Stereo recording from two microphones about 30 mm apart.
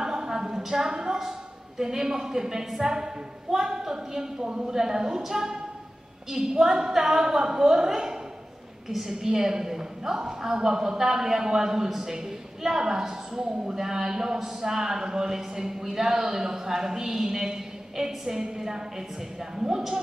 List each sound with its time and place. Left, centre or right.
0.0 s a sound: centre
0.6 s a woman's voice: centre; by 4.7 s right
4.7 s a woman's voice: centre